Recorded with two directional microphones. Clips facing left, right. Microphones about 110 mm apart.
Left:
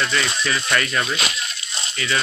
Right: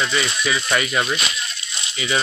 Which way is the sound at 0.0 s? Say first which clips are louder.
Right 1 dB; 10° right (ahead or behind).